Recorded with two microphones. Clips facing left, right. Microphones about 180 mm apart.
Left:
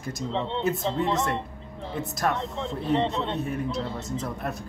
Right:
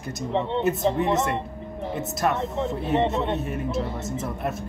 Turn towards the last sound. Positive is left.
turn(degrees=-20)  # may be behind; listen again after turning